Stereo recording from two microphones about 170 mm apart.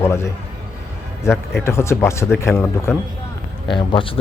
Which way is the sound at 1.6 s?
15° left (ahead or behind).